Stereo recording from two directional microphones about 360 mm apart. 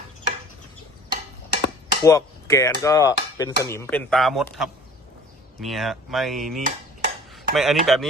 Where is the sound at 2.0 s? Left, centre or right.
Centre.